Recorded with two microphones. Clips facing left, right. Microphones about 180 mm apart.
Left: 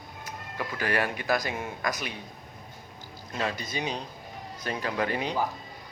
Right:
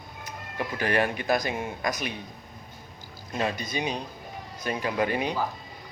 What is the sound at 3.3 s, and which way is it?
Speech, 15° right (ahead or behind).